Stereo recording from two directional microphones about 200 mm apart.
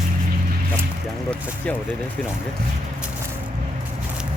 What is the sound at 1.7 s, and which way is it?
Speech, 5° left (ahead or behind).